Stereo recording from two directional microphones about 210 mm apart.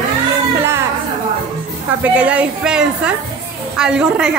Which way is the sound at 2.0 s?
5° right (ahead or behind).